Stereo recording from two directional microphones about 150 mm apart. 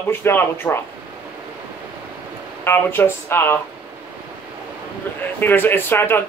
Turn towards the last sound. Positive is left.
turn(degrees=15)  # may be behind; listen again after turning